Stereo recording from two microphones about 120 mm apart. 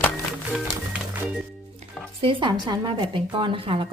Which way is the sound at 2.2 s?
45° right (ahead or behind).